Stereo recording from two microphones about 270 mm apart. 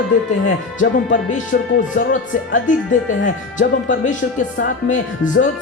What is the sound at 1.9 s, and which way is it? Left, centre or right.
Speech, left.